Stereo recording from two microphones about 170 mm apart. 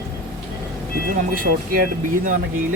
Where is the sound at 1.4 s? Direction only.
55° right (ahead or behind).